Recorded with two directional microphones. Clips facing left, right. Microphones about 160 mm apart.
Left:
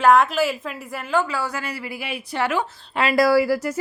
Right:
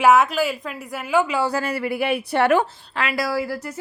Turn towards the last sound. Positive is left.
turn(degrees=90)